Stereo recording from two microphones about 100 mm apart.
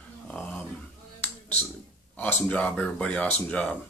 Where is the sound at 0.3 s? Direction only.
15° left (ahead or behind).